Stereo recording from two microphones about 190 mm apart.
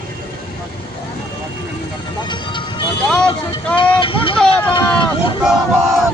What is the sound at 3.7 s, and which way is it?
Vehicle, 25° left (ahead or behind).